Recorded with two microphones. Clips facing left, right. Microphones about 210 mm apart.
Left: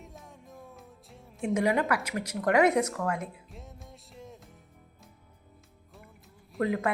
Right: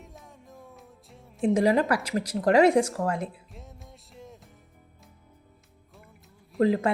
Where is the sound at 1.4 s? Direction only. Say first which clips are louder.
Right 5 dB; 35° right (ahead or behind).